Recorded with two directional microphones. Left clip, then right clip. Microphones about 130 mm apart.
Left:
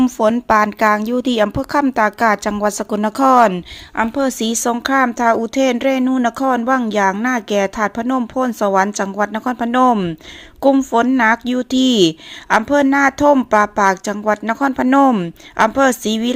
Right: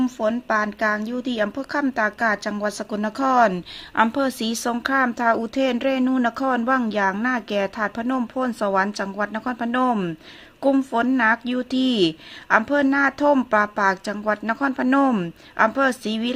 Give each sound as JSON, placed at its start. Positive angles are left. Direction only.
{"t": 0.0, "sound": "speech", "side_deg": 50}
{"t": 3.5, "sound": "a woman's voice", "side_deg": 20}
{"t": 4.2, "sound": "speech", "side_deg": 30}
{"t": 9.9, "sound": "a woman's voice", "side_deg": 25}
{"t": 11.2, "sound": "speech", "side_deg": 35}